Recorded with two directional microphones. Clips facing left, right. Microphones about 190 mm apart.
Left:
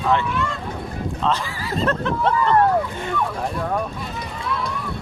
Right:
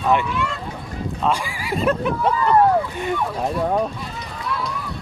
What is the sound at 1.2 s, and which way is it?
Speech, 10° right (ahead or behind).